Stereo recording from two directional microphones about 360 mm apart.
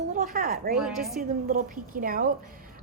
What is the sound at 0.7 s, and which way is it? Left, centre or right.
Speech, centre.